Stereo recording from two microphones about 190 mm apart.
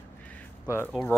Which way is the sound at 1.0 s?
15° left (ahead or behind).